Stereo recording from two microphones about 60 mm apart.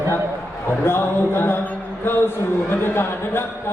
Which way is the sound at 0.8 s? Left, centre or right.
Left.